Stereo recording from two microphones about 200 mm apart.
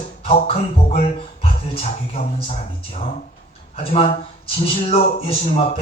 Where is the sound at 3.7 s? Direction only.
30° left (ahead or behind).